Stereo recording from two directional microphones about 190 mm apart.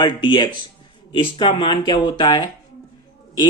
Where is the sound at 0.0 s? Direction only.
25° left (ahead or behind).